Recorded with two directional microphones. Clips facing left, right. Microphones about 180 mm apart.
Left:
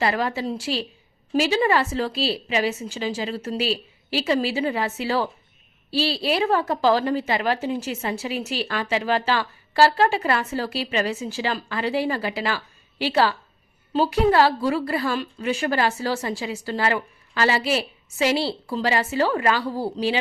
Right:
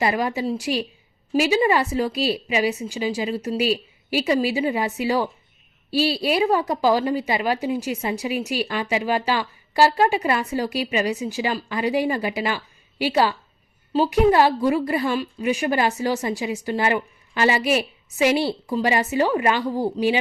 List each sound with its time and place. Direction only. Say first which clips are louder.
0.0 s a woman's voice: right 1 dB; 15° right (ahead or behind)